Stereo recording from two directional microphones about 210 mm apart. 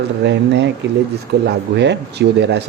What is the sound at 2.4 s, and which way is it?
Speech, 55° right (ahead or behind).